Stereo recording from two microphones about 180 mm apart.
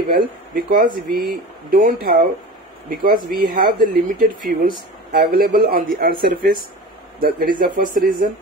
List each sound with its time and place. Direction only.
0.1 s speech: 50° right (ahead or behind)
3.3 s speech: 50° right (ahead or behind)